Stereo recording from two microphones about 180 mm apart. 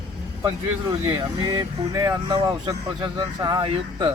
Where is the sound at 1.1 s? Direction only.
20° right (ahead or behind).